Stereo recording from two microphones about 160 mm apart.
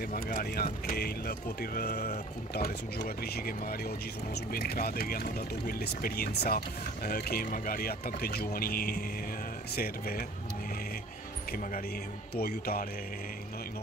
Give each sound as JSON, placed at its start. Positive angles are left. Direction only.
{"t": 0.1, "sound": "speech", "side_deg": 65}
{"t": 12.4, "sound": "speech", "side_deg": 70}